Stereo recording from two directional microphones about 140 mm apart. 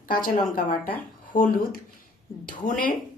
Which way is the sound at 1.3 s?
80° left.